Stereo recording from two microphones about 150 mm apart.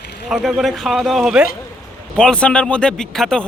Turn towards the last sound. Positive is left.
turn(degrees=5)  # may be behind; listen again after turning